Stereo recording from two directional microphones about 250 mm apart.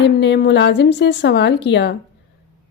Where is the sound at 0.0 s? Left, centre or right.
Left.